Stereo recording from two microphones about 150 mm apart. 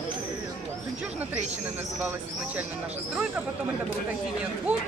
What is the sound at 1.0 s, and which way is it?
Speech, 10° right (ahead or behind).